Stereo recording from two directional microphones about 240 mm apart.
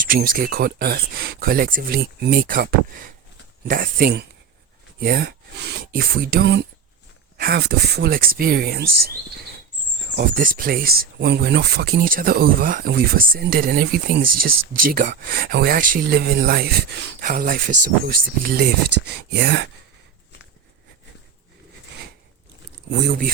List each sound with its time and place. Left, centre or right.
0.0 s speech: right
10.2 s speech: right
23.0 s speech: right